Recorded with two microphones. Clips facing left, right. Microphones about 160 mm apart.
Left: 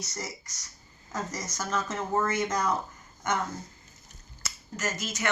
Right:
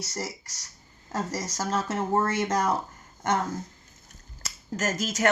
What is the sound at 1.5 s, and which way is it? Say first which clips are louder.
Speech: right 3 dB; 35° right (ahead or behind).